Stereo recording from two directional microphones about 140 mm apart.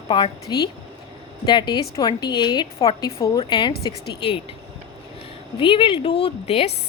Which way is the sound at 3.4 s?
35° left (ahead or behind).